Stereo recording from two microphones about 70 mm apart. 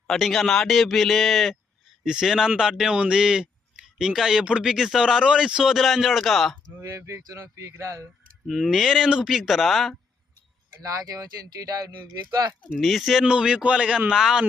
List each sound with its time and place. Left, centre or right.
0.1 s speech: centre
6.8 s speech: right
8.4 s speech: centre
10.8 s speech: right
12.8 s speech: centre
13.2 s speech: centre